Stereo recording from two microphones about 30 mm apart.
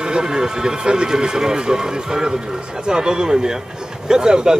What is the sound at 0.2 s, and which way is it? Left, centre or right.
Speech, right.